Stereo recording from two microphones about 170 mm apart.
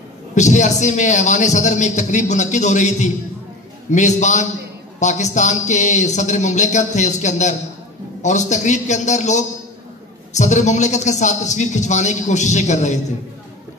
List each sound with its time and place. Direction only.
0.3 s a man's voice: 45° left (ahead or behind)